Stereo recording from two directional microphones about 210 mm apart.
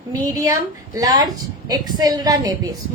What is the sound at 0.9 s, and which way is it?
A woman's voice, 20° right (ahead or behind).